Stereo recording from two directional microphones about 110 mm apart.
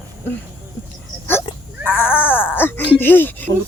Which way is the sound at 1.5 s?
60° left (ahead or behind).